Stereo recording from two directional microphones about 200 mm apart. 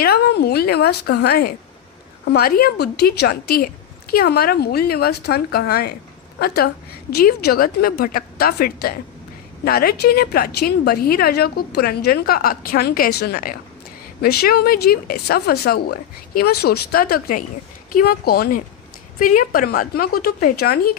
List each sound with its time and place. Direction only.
0.0 s a woman's voice: 55° left (ahead or behind)